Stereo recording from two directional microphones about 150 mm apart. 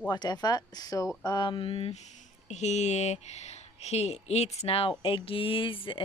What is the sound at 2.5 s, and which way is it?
Speech, 50° left (ahead or behind).